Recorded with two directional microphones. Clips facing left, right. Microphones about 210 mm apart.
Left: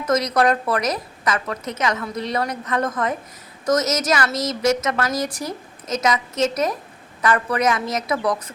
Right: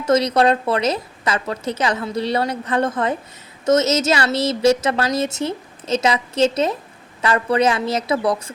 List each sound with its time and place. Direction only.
0.0 s a woman's voice: 30° right (ahead or behind)